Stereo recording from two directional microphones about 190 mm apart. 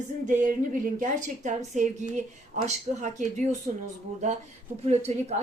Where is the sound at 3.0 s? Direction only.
40° right (ahead or behind).